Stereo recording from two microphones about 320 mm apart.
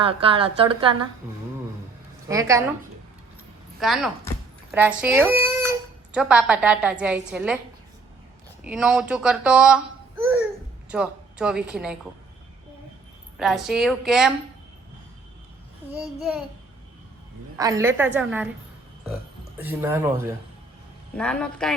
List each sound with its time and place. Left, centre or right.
0.0 s a woman's voice: centre
3.8 s a woman's voice: centre
8.6 s a child's voice: centre
13.3 s a woman's voice: centre
16.0 s a woman's voice: centre
17.6 s a woman's voice: centre
19.5 s a woman's voice: centre